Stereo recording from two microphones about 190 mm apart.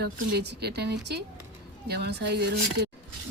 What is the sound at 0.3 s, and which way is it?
Speech, 60° right (ahead or behind).